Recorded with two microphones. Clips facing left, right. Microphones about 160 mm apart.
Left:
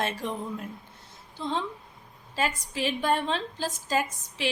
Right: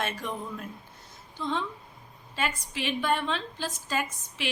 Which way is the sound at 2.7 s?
40° left (ahead or behind).